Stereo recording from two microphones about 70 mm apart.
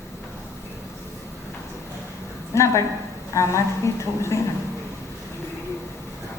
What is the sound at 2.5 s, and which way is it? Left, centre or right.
A woman's voice, left.